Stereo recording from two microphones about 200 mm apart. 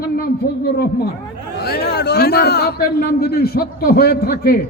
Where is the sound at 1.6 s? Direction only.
50° left (ahead or behind).